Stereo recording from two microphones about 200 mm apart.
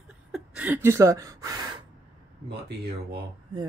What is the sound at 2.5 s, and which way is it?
Speech, 55° right (ahead or behind).